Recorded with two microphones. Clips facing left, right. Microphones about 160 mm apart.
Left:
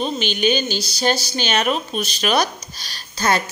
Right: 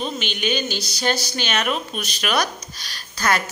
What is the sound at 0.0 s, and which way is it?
A woman's voice, 35° left (ahead or behind).